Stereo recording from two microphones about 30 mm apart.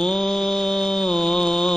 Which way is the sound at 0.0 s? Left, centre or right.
Centre.